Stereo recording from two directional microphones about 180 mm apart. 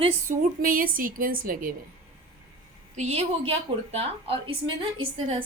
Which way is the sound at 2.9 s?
40° right (ahead or behind).